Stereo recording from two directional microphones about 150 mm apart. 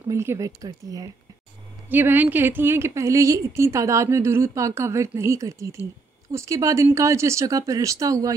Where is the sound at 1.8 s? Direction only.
15° right (ahead or behind).